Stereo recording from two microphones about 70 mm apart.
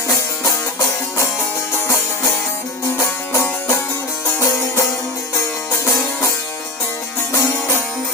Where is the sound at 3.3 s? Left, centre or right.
Left.